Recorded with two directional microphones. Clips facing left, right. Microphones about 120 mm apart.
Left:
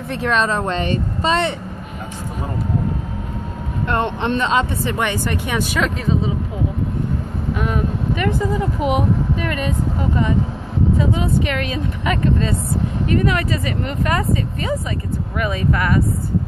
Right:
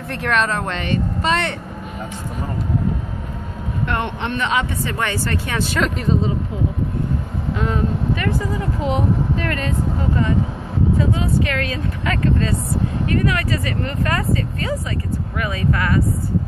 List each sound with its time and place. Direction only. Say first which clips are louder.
0.1 s speech: left 1 dB; 20° left (ahead or behind)
3.9 s speech: left 5 dB; 30° left (ahead or behind)
4.9 s speech: left 1 dB; 15° left (ahead or behind)
5.8 s speech: right 2 dB; 5° left (ahead or behind)
7.5 s speech: right 1 dB; 10° left (ahead or behind)